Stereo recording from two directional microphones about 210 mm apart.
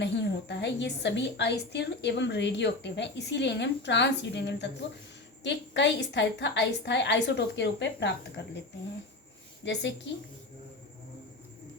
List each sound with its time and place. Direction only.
0.0 s a woman's voice: 55° left (ahead or behind)
9.6 s a woman's voice: 55° left (ahead or behind)